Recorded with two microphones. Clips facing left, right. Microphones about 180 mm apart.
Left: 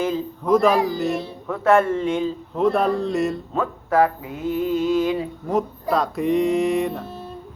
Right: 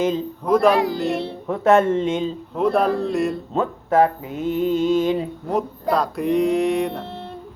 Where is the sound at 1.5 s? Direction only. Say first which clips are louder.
Right 1 dB; 25° right (ahead or behind).